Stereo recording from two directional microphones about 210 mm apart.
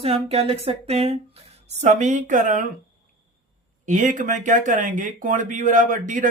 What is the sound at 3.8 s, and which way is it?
Speech, 35° right (ahead or behind).